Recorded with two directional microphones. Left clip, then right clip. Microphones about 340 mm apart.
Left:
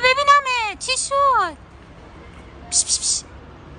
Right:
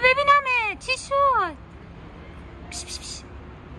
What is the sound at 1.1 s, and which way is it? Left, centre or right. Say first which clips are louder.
Vehicle: left 3 dB; centre.